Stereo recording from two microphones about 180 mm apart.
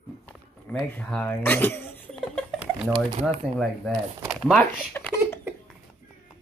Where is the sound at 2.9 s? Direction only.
30° right (ahead or behind).